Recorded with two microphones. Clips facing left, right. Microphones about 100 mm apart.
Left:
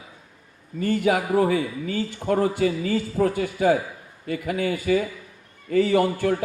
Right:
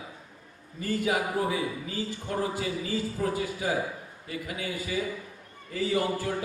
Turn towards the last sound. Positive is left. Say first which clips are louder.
# left 7 dB
turn(degrees=65)  # may be behind; listen again after turning